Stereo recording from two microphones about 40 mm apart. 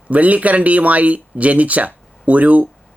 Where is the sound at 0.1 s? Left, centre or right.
Right.